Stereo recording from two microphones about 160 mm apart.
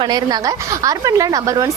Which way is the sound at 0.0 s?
25° right (ahead or behind).